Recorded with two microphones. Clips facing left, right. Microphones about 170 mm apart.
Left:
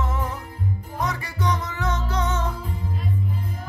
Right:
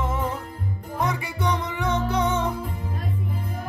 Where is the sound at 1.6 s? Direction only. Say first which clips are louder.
Right 3 dB; 15° right (ahead or behind).